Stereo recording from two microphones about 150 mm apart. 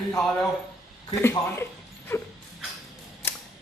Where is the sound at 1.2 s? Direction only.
15° left (ahead or behind).